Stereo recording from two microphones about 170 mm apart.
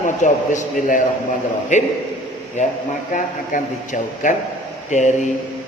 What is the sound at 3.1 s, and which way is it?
A man's voice, 50° left (ahead or behind).